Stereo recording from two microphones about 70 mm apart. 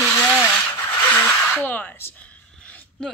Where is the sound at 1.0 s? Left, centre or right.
Left.